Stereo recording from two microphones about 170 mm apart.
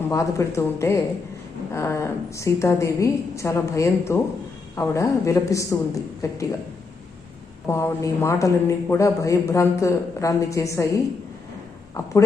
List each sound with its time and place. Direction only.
0.1 s a man's voice: 15° left (ahead or behind)
7.7 s a man's voice: 15° left (ahead or behind)